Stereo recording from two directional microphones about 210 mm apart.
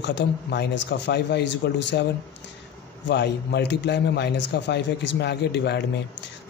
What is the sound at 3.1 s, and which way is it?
A man's voice, 55° left (ahead or behind).